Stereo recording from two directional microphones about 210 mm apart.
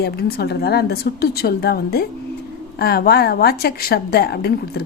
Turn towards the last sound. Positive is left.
turn(degrees=50)  # may be behind; listen again after turning